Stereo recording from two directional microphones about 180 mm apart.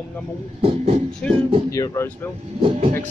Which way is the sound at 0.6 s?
35° right (ahead or behind).